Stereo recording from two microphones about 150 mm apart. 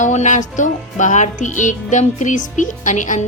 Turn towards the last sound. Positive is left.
turn(degrees=55)  # may be behind; listen again after turning